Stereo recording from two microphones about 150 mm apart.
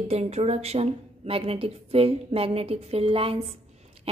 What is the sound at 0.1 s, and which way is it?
A woman's voice, 45° right (ahead or behind).